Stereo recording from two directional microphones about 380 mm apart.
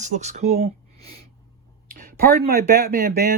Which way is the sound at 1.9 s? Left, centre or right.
Right.